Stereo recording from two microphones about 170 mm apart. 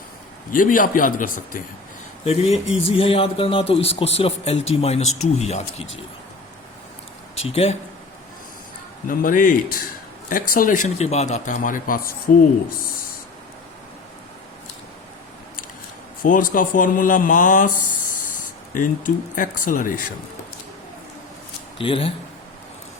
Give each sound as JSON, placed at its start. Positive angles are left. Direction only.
{"t": 0.5, "sound": "speech", "side_deg": 55}
{"t": 2.2, "sound": "a man's voice", "side_deg": 40}
{"t": 7.3, "sound": "a man's voice", "side_deg": 35}
{"t": 9.0, "sound": "speech", "side_deg": 55}
{"t": 16.2, "sound": "speech", "side_deg": 50}
{"t": 21.8, "sound": "a man's voice", "side_deg": 30}